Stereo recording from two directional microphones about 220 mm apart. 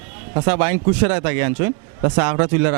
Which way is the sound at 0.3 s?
10° right (ahead or behind).